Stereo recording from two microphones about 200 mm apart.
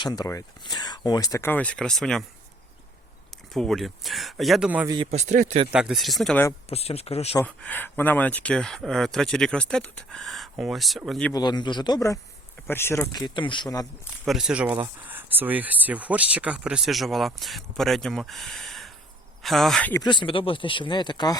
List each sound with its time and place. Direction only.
0.0 s speech: 20° left (ahead or behind); by 2.2 s centre (ahead or behind)
3.5 s speech: centre (ahead or behind)
5.1 s speech: 35° right (ahead or behind)
5.7 s speech: 5° right (ahead or behind)
6.7 s speech: 30° left (ahead or behind)
7.3 s speech: 5° left (ahead or behind)
11.3 s speech: 20° left (ahead or behind)
14.3 s speech: centre (ahead or behind)
20.0 s speech: 25° left (ahead or behind)